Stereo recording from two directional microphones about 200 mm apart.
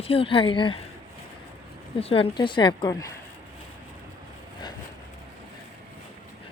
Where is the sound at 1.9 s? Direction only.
30° left (ahead or behind).